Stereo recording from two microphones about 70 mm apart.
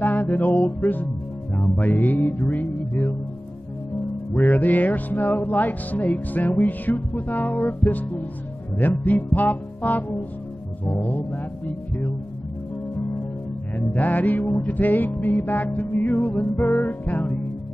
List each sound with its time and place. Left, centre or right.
0.0 s music: left
4.4 s music: left
13.7 s music: left